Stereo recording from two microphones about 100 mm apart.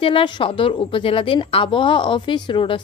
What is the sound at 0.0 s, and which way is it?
A woman's voice, 60° left (ahead or behind).